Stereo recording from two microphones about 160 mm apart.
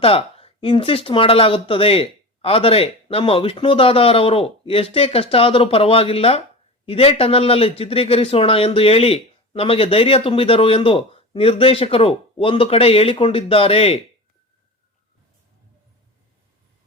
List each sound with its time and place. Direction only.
0.0 s speech: 35° left (ahead or behind)